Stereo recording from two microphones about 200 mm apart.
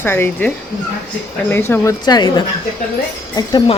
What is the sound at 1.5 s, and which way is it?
Speech, 10° left (ahead or behind).